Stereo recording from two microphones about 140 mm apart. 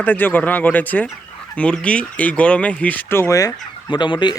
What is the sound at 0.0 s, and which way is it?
Speech, 10° left (ahead or behind).